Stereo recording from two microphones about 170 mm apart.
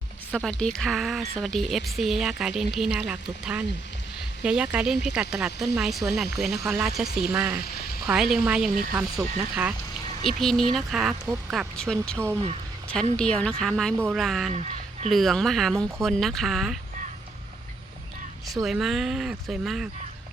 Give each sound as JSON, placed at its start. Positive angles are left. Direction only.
{"t": 0.3, "sound": "speech", "side_deg": 5}
{"t": 13.9, "sound": "speech", "side_deg": -15}
{"t": 14.2, "sound": "speech", "side_deg": 0}
{"t": 14.5, "sound": "speech", "side_deg": -40}
{"t": 15.1, "sound": "speech", "side_deg": 0}
{"t": 18.6, "sound": "speech", "side_deg": 0}